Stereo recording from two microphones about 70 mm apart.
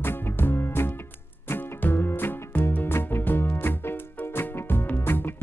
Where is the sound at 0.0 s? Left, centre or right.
Left.